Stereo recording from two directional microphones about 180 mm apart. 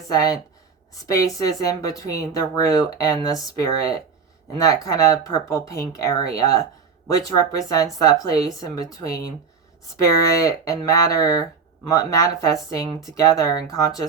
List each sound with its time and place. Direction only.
0.1 s speech: 20° left (ahead or behind)